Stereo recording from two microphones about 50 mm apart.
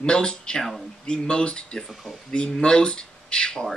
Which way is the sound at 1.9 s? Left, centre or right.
Centre.